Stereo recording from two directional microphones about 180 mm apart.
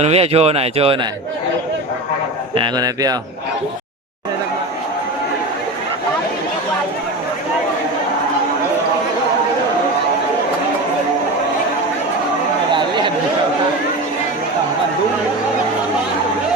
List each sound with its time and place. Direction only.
0.0 s speech: 35° right (ahead or behind)
2.6 s speech: 20° right (ahead or behind)